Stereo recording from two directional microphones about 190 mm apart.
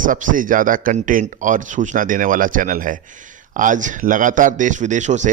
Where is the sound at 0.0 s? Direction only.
45° right (ahead or behind).